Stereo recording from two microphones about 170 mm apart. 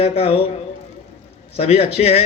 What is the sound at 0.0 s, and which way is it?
A man's voice, 35° left (ahead or behind).